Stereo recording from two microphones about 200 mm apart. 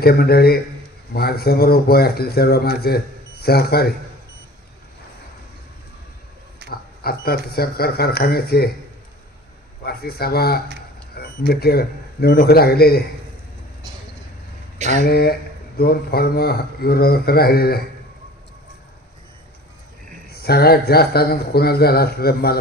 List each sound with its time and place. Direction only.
0.0 s speech: 50° left (ahead or behind)
6.7 s speech: 50° left (ahead or behind)
9.8 s speech: 50° left (ahead or behind)
15.0 s speech: 50° left (ahead or behind)
20.2 s speech: 50° left (ahead or behind)